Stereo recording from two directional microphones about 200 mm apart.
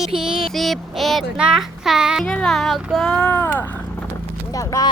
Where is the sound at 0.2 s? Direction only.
Centre (ahead or behind).